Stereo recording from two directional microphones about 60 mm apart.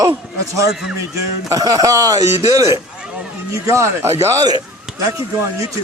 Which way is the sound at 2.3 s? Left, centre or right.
Right.